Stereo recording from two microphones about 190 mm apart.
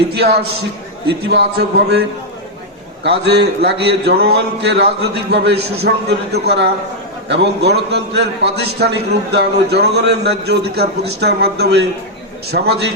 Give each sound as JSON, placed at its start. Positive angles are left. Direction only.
{"t": 1.3, "sound": "a man's voice", "side_deg": -60}
{"t": 3.2, "sound": "a man's voice", "side_deg": -60}